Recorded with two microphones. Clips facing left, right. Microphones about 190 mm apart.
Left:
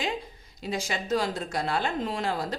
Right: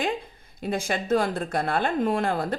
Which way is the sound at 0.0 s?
55° right (ahead or behind).